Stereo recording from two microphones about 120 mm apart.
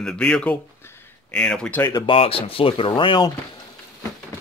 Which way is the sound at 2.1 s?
50° left (ahead or behind).